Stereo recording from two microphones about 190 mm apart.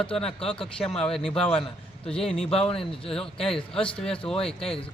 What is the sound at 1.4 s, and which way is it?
Speech, 30° left (ahead or behind).